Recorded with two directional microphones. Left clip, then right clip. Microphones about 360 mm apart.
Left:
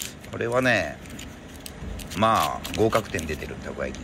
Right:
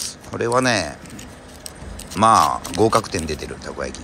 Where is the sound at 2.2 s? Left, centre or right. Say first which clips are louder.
Right 7 dB; centre.